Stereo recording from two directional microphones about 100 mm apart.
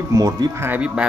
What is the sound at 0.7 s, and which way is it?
Speech, 10° right (ahead or behind).